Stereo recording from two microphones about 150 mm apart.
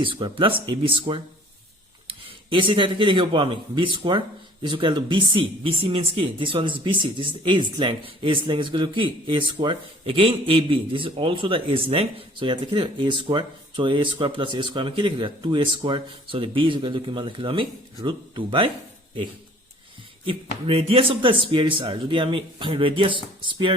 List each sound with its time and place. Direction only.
0.0 s speech: 35° right (ahead or behind)
20.7 s speech: 40° right (ahead or behind)